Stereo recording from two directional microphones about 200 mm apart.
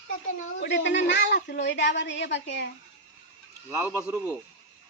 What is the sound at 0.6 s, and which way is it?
A woman's voice, 60° left (ahead or behind).